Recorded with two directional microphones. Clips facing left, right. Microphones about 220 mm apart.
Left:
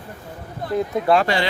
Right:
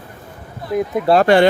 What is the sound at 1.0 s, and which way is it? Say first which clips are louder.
Speech: right 4 dB; 40° right (ahead or behind).